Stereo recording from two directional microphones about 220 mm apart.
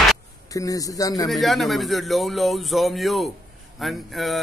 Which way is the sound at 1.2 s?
Centre (ahead or behind).